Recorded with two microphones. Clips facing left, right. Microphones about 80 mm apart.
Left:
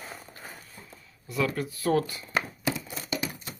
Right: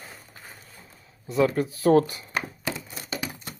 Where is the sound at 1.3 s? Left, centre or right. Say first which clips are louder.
Right 6 dB; right.